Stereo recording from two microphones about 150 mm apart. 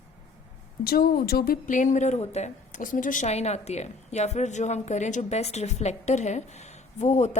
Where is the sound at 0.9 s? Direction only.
90° left.